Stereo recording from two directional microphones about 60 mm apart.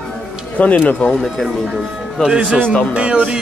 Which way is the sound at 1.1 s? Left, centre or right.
Centre.